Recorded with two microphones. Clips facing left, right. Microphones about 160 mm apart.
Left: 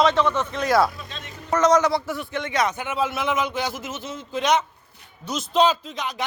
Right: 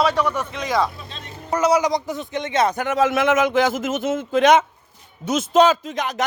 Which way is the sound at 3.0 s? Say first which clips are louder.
Right 7 dB; 90° right.